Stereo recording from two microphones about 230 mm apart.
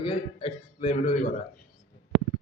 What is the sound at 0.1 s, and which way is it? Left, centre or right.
A man's voice, left.